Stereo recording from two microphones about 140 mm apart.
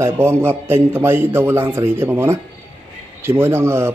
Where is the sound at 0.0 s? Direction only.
20° right (ahead or behind).